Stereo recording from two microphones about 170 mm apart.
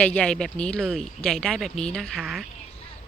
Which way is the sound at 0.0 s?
5° left (ahead or behind).